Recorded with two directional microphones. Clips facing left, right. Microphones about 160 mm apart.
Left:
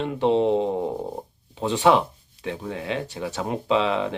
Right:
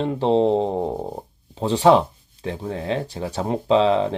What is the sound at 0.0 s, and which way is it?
Speech, 35° right (ahead or behind).